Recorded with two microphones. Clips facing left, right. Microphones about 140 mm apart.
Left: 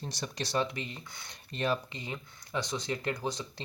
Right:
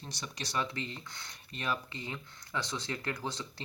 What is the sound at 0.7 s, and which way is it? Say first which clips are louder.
Speech: even; 15° left (ahead or behind).